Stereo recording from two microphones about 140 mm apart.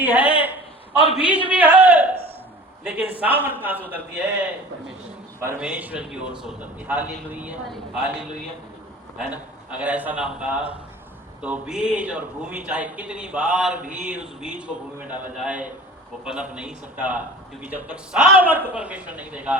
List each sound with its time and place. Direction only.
0.0 s a man's voice: 10° right (ahead or behind)
9.1 s a man's voice: 5° right (ahead or behind)
13.7 s mantra: 65° right (ahead or behind)
14.0 s a man's voice: 10° right (ahead or behind)